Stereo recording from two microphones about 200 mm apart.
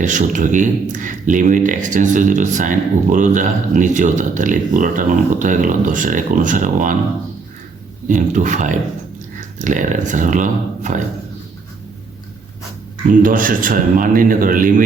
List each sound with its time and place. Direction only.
0.0 s speech: 40° right (ahead or behind)
8.0 s speech: 40° right (ahead or behind)
13.1 s a man's voice: 40° right (ahead or behind)